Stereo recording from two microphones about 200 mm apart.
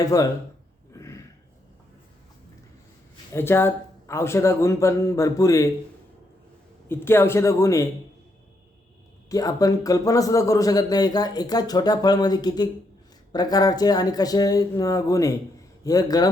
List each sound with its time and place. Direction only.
0.0 s speech: 15° left (ahead or behind)
0.9 s a sound: 15° left (ahead or behind)
3.3 s speech: 10° left (ahead or behind)
6.8 s speech: 10° left (ahead or behind)
9.3 s a man's voice: 15° left (ahead or behind)